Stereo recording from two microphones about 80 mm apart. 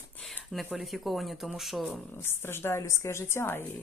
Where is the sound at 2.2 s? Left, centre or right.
Left.